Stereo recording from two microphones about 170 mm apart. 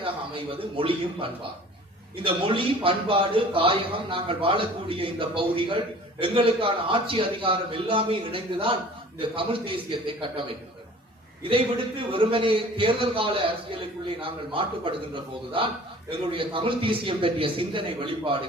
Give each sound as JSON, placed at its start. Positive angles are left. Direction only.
{"t": 0.0, "sound": "a man's voice", "side_deg": -30}
{"t": 11.4, "sound": "a man's voice", "side_deg": -30}